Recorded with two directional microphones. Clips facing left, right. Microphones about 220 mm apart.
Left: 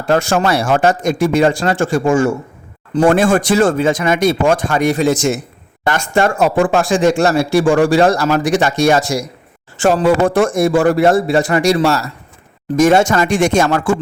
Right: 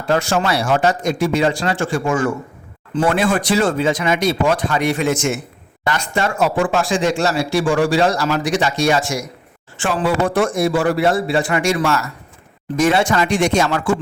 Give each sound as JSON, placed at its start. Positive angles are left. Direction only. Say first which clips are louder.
{"t": 0.1, "sound": "speech", "louder": "left 4 dB", "side_deg": 50}
{"t": 2.0, "sound": "a man's voice", "louder": "left 6 dB", "side_deg": 25}
{"t": 2.9, "sound": "speech", "louder": "left 5 dB", "side_deg": 45}
{"t": 5.8, "sound": "speech", "louder": "left 5 dB", "side_deg": 50}